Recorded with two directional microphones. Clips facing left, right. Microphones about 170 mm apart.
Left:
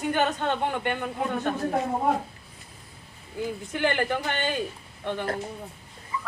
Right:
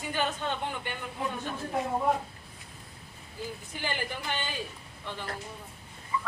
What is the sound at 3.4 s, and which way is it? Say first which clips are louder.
A man's voice: left 9 dB; 65° left (ahead or behind).